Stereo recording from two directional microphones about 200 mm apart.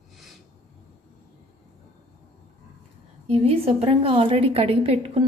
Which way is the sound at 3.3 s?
30° right (ahead or behind).